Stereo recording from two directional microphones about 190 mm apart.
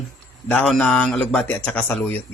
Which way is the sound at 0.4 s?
5° left (ahead or behind).